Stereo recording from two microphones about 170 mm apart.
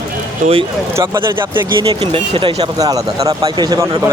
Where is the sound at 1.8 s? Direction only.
35° right (ahead or behind).